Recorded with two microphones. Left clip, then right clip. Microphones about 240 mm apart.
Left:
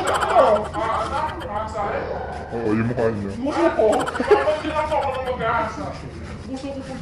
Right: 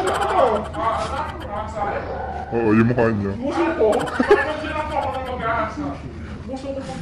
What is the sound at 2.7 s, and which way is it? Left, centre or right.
Speech, right.